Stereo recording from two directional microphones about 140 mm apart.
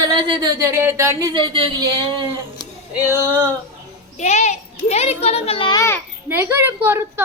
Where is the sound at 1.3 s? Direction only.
35° right (ahead or behind).